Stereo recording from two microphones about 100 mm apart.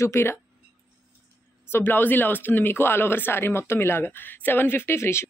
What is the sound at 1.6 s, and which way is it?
Speech, 20° left (ahead or behind).